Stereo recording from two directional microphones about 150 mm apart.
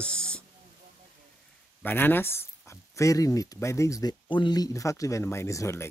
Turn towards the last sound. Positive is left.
turn(degrees=20)  # may be behind; listen again after turning